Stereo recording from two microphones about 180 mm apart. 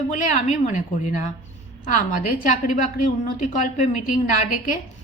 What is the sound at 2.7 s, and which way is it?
A woman's voice, 45° left (ahead or behind).